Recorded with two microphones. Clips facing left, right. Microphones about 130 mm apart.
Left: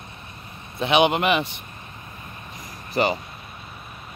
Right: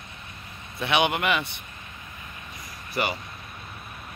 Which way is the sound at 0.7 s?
25° left (ahead or behind).